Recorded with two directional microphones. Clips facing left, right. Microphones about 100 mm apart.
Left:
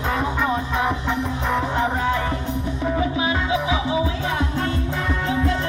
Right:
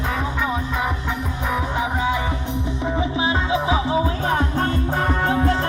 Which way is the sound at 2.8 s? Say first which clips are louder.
Left 1 dB; 20° right (ahead or behind).